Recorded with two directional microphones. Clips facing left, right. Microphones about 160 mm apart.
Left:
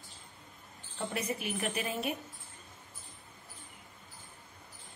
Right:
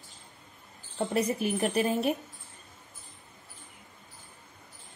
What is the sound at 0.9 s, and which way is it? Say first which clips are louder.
A woman's voice: right 8 dB; 40° right (ahead or behind).